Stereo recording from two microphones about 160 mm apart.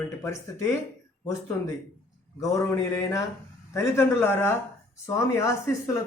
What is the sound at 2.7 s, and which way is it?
Speech, 20° left (ahead or behind).